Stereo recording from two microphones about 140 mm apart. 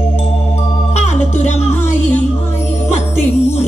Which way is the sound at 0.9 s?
55° left (ahead or behind).